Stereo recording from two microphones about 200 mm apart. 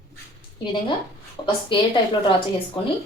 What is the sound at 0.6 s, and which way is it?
Speech, 25° left (ahead or behind).